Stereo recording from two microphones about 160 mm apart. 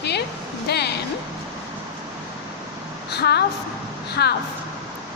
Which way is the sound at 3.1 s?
90° left.